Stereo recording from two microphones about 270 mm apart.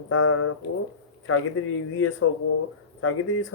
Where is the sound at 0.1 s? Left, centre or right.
Left.